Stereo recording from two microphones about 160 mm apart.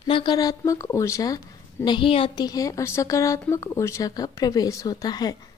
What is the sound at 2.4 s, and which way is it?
Speech, 20° left (ahead or behind).